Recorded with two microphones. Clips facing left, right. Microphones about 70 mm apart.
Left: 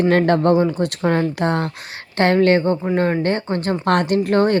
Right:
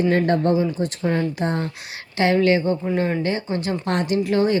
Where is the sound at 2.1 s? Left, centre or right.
Left.